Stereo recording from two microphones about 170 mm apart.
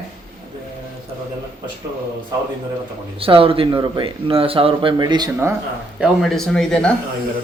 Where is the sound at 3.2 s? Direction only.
35° right (ahead or behind).